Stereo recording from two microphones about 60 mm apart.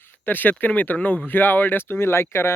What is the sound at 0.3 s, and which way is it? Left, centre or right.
Speech, left.